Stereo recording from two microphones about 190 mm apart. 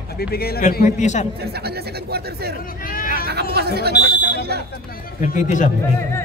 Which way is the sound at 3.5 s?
55° right (ahead or behind).